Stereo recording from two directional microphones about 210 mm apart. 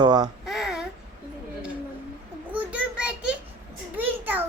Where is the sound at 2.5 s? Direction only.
5° right (ahead or behind).